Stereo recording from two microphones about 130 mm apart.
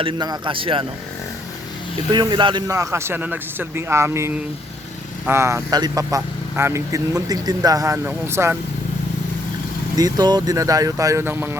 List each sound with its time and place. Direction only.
0.0 s a man's voice: 35° right (ahead or behind)
2.1 s a man's voice: 35° right (ahead or behind)
2.6 s speech: 25° right (ahead or behind)
10.0 s speech: 30° right (ahead or behind)